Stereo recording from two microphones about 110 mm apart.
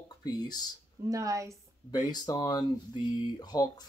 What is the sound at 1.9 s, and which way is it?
Speech, 40° left (ahead or behind).